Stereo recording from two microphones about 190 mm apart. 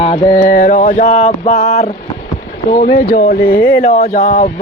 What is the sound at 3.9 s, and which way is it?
Mantra, 35° left (ahead or behind).